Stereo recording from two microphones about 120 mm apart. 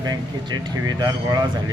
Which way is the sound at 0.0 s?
35° right (ahead or behind).